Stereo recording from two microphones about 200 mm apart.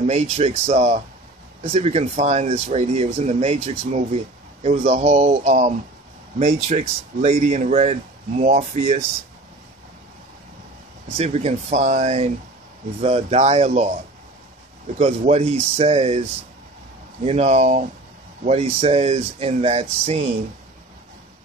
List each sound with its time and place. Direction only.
0.0 s speech: 30° right (ahead or behind)
11.1 s speech: 30° right (ahead or behind)
15.0 s speech: 35° right (ahead or behind)